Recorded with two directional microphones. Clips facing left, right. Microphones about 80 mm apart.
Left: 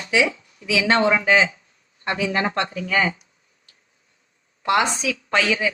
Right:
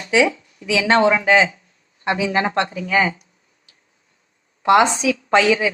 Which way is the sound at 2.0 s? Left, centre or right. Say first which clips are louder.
Right 3 dB; centre.